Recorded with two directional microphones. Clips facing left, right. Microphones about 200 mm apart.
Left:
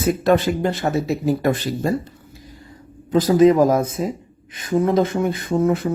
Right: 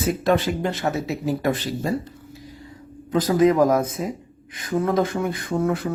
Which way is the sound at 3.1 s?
25° left (ahead or behind).